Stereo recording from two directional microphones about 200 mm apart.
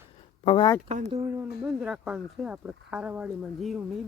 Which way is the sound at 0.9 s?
35° right (ahead or behind).